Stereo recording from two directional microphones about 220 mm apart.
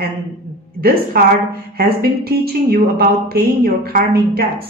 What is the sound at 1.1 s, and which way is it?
Speech, 45° right (ahead or behind).